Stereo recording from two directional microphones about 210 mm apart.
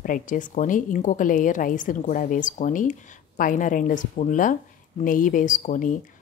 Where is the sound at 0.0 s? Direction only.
40° left (ahead or behind).